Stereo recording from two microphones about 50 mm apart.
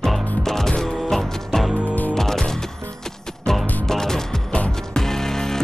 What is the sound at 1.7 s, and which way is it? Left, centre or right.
Music, right.